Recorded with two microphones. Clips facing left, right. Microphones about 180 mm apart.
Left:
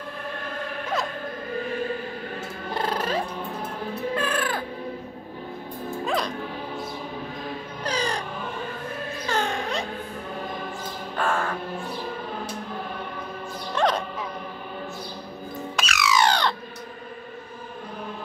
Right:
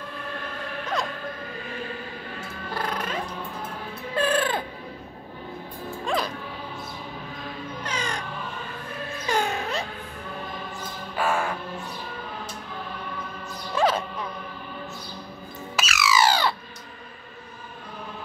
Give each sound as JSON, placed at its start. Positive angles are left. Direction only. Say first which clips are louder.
{"t": 2.7, "sound": "music", "louder": "left 4 dB", "side_deg": 30}
{"t": 4.2, "sound": "cat", "louder": "right 3 dB", "side_deg": -30}
{"t": 6.0, "sound": "music", "louder": "even", "side_deg": 0}
{"t": 7.8, "sound": "music", "louder": "left 5 dB", "side_deg": 35}
{"t": 9.3, "sound": "music", "louder": "right 1 dB", "side_deg": -10}
{"t": 11.1, "sound": "music", "louder": "right 1 dB", "side_deg": -10}
{"t": 13.7, "sound": "music", "louder": "even", "side_deg": -5}
{"t": 15.7, "sound": "squawk", "louder": "even", "side_deg": 0}